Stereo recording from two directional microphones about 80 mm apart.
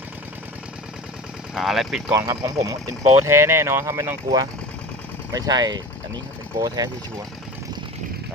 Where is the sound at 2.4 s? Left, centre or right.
Right.